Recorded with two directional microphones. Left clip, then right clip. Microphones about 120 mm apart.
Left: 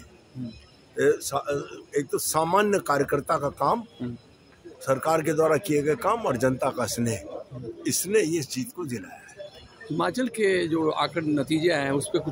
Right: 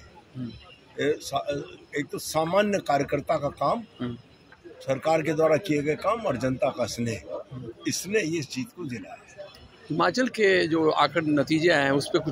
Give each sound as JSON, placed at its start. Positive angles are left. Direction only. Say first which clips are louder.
{"t": 0.9, "sound": "a man's voice", "louder": "left 3 dB", "side_deg": 40}
{"t": 9.9, "sound": "speech", "louder": "right 3 dB", "side_deg": 5}